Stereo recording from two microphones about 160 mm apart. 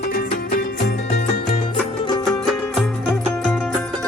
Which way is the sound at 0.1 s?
70° left (ahead or behind).